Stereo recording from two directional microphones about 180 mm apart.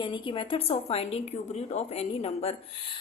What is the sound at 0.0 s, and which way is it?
A woman's voice, 25° left (ahead or behind).